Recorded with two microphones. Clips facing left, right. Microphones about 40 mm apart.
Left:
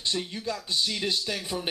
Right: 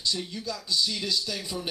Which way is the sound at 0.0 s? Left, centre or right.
Left.